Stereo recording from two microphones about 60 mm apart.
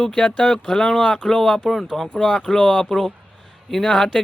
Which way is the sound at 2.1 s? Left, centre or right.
Centre.